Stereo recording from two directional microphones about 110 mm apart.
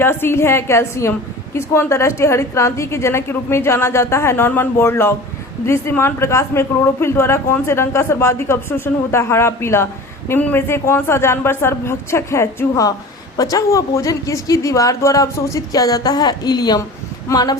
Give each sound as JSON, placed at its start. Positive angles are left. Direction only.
{"t": 0.0, "sound": "a woman's voice", "side_deg": 20}